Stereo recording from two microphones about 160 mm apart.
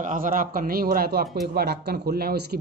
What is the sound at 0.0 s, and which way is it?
A man's voice, 55° right (ahead or behind).